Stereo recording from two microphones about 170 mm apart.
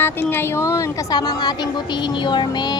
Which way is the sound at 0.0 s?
10° left (ahead or behind).